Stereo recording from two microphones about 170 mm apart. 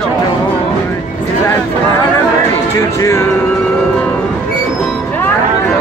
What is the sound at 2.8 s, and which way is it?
Music, 15° left (ahead or behind).